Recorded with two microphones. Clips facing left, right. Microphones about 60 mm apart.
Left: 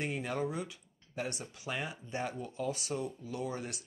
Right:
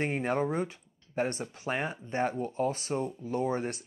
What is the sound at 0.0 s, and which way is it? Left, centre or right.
Speech, right.